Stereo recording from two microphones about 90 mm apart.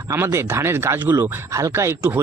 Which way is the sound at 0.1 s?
30° right (ahead or behind).